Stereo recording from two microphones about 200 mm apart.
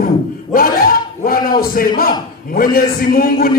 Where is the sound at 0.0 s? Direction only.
45° left (ahead or behind).